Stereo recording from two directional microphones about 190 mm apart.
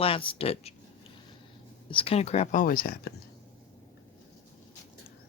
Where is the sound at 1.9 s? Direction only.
30° left (ahead or behind); by 3.1 s 50° left (ahead or behind).